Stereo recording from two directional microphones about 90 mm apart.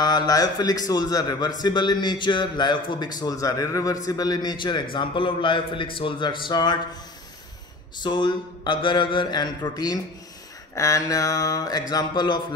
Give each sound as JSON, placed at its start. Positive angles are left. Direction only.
{"t": 0.0, "sound": "a man's voice", "side_deg": 50}
{"t": 8.0, "sound": "speech", "side_deg": 60}
{"t": 10.7, "sound": "mantra", "side_deg": 35}